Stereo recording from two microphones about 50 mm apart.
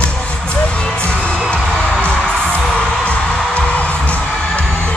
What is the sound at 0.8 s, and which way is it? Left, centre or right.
Music, left.